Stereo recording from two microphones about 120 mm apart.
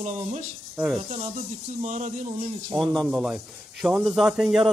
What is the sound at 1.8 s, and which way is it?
Speech, 90° right.